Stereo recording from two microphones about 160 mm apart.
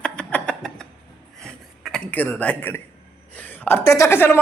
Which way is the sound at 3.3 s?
10° left (ahead or behind).